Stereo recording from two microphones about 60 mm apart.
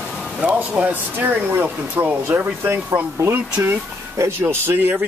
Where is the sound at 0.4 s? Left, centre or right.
Right.